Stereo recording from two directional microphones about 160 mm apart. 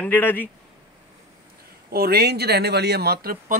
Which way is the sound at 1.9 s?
75° right (ahead or behind).